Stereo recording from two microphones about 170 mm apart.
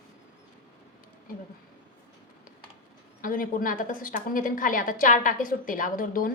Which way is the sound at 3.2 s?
55° left (ahead or behind).